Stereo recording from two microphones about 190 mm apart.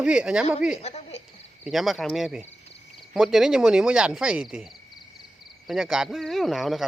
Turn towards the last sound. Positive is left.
turn(degrees=0)  # may be behind; listen again after turning